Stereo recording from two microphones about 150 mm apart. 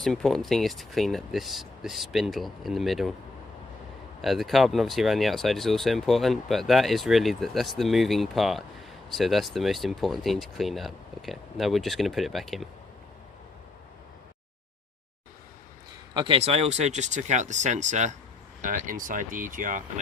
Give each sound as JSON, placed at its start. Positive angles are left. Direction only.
{"t": 0.0, "sound": "speech", "side_deg": 5}
{"t": 4.2, "sound": "speech", "side_deg": 0}
{"t": 16.1, "sound": "speech", "side_deg": -35}